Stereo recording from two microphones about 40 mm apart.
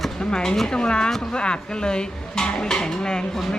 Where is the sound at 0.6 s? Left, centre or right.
Left.